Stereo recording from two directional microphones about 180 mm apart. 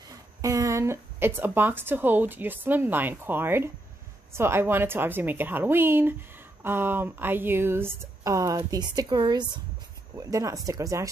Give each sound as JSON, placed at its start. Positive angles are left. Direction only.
{"t": 0.1, "sound": "speech", "side_deg": -15}